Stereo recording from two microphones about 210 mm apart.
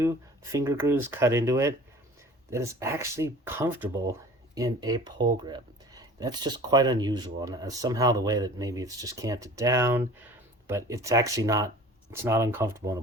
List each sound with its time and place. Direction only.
0.0 s speech: 15° right (ahead or behind)